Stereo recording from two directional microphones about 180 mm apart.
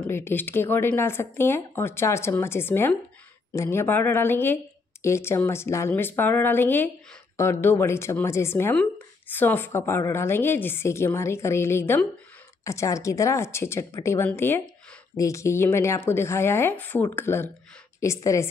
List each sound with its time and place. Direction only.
0.0 s a woman's voice: 10° left (ahead or behind)